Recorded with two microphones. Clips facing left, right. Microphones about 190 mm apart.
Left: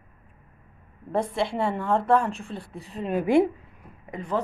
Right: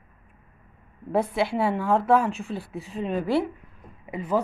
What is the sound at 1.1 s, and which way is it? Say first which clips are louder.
A woman's voice: right 2 dB; 5° right (ahead or behind).